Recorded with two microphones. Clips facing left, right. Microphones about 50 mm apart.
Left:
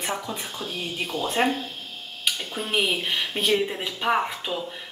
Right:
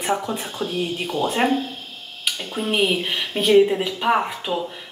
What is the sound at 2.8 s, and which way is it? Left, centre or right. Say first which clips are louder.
Speech: right 3 dB; centre.